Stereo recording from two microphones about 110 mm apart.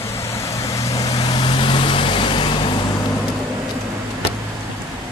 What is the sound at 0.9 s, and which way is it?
Vehicle, 40° left (ahead or behind).